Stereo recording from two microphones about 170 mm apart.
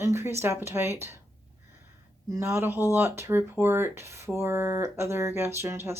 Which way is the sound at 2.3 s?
15° right (ahead or behind).